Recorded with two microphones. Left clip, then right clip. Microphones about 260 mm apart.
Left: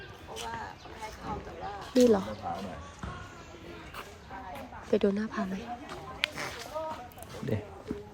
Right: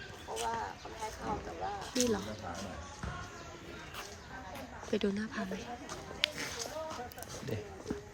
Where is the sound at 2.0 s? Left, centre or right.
Centre.